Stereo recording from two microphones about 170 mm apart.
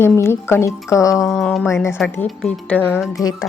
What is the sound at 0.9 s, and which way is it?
Music, 20° left (ahead or behind).